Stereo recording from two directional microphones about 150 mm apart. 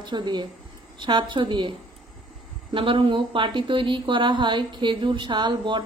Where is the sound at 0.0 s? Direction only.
30° right (ahead or behind).